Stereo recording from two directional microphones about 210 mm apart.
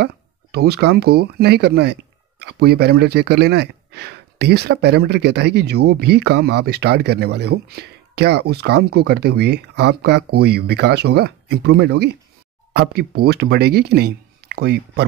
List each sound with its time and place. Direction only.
0.0 s speech: 50° right (ahead or behind)